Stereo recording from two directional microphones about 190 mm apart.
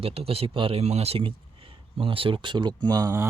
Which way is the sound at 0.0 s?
30° right (ahead or behind).